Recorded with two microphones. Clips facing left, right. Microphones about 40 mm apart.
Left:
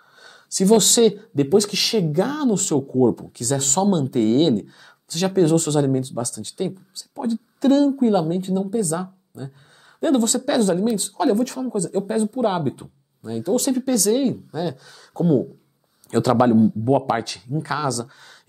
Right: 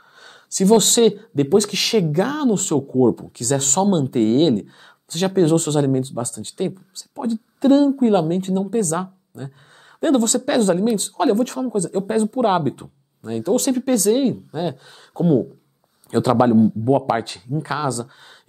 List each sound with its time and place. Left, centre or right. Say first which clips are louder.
0.2 s speech: right 1 dB; right
7.6 s speech: right 2 dB; right
8.0 s speech: right 2 dB; right
12.4 s speech: right 3 dB; right
13.2 s speech: right 2 dB; right
17.6 s speech: right 1 dB; right